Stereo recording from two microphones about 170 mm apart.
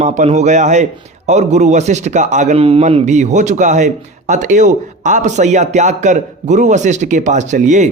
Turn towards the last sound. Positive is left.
turn(degrees=-45)  # may be behind; listen again after turning